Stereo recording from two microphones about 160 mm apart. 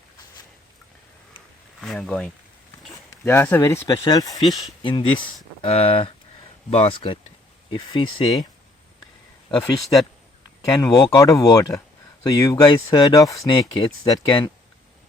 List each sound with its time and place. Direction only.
1.8 s speech: 5° left (ahead or behind); by 8.4 s 30° left (ahead or behind)
9.5 s speech: centre (ahead or behind)
11.0 s speech: 20° left (ahead or behind)